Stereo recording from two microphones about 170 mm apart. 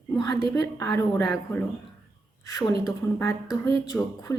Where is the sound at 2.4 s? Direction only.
20° left (ahead or behind).